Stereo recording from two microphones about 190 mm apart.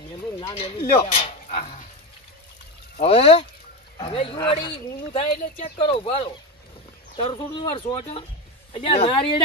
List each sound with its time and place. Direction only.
0.4 s speech: 30° left (ahead or behind)
1.1 s a sound: 30° left (ahead or behind)
3.0 s speech: 30° left (ahead or behind)